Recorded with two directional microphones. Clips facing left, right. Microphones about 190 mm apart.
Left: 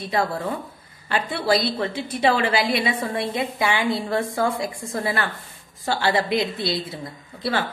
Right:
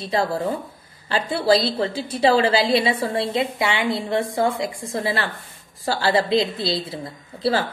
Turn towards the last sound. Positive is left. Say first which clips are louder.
# right 4 dB
turn(degrees=-30)  # may be behind; listen again after turning